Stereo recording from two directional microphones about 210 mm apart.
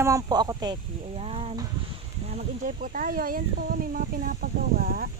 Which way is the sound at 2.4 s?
40° right (ahead or behind).